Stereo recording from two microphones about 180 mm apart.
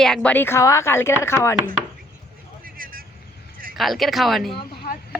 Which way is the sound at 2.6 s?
50° right (ahead or behind).